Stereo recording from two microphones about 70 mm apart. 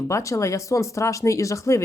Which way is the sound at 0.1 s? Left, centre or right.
Left.